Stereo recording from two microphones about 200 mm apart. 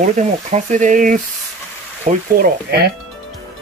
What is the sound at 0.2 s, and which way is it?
Speech, 40° right (ahead or behind).